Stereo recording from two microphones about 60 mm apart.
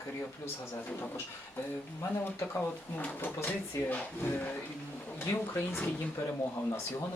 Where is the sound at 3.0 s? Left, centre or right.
Left.